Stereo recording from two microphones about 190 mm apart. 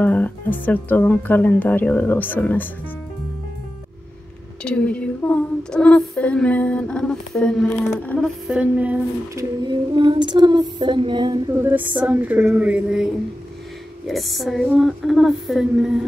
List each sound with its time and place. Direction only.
0.0 s speech: 10° left (ahead or behind)
4.6 s female singing: 5° left (ahead or behind)
8.5 s female singing: 10° right (ahead or behind); by 11.3 s 25° right (ahead or behind)
11.6 s a sound: 10° right (ahead or behind)
14.0 s female singing: centre (ahead or behind)